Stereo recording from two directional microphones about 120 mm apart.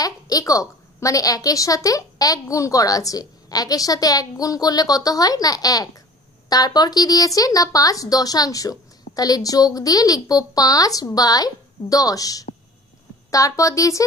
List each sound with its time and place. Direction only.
0.0 s a woman's voice: 30° left (ahead or behind)